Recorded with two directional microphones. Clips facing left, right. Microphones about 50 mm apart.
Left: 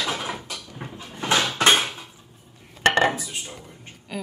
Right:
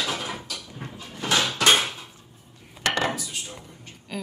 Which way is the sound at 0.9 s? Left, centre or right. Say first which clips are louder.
Left 2 dB; left.